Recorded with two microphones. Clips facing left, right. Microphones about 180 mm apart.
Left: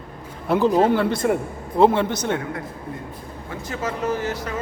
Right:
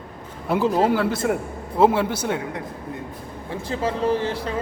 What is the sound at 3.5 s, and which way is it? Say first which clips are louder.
Speech: right 3 dB; 30° right (ahead or behind).